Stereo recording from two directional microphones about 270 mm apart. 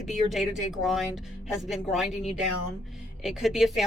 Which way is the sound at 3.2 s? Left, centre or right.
Centre.